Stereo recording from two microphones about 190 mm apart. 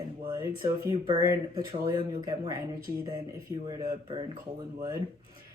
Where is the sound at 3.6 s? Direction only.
25° right (ahead or behind).